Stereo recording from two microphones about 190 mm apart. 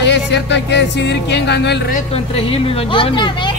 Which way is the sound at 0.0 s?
65° left (ahead or behind).